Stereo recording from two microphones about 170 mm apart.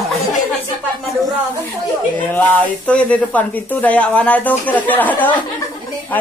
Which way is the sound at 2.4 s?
10° left (ahead or behind).